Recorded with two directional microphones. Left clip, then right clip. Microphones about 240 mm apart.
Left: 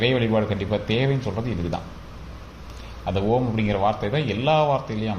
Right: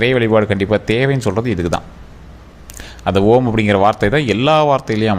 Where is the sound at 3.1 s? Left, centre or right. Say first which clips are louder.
Right 11 dB; right.